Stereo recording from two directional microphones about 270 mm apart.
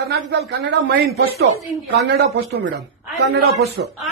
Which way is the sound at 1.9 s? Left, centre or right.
Right.